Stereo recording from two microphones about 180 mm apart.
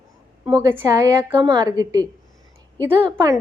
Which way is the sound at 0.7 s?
15° right (ahead or behind).